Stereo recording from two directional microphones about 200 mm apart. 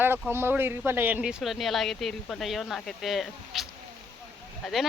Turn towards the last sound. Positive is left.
turn(degrees=0)  # may be behind; listen again after turning